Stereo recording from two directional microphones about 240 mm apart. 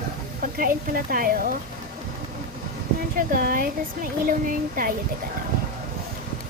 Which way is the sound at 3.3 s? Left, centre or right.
Right.